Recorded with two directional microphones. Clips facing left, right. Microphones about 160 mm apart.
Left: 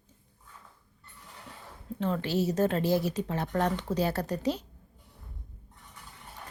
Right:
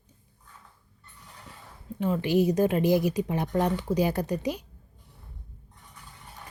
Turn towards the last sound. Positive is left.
turn(degrees=-10)  # may be behind; listen again after turning